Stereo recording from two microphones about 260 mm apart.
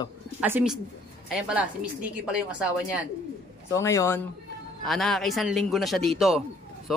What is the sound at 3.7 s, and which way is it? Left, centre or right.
A man's voice, centre.